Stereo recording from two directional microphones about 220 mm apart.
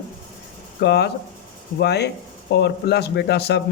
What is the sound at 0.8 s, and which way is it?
Speech, 50° left (ahead or behind).